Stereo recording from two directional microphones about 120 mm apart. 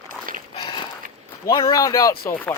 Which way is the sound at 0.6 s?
45° left (ahead or behind).